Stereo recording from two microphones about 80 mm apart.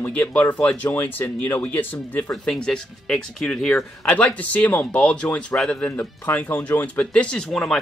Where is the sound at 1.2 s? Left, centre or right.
Left.